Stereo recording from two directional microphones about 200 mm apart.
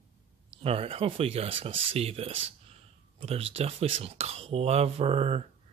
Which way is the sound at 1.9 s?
30° right (ahead or behind).